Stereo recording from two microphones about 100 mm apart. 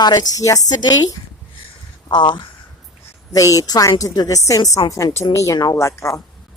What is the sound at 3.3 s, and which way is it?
A woman's voice, 35° left (ahead or behind).